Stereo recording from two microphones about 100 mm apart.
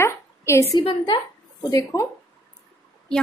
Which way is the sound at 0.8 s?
60° left (ahead or behind).